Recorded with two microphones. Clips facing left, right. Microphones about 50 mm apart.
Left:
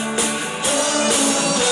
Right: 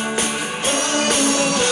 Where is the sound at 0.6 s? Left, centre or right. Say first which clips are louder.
Left 1 dB; right.